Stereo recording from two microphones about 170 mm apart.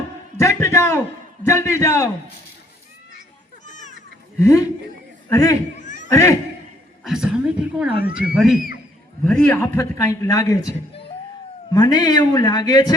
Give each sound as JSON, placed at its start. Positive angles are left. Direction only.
{"t": 0.3, "sound": "a man's voice", "side_deg": 15}
{"t": 3.7, "sound": "children playing", "side_deg": 45}
{"t": 4.4, "sound": "a man's voice", "side_deg": 15}
{"t": 7.0, "sound": "a woman's voice", "side_deg": -5}
{"t": 9.2, "sound": "a man's voice", "side_deg": 5}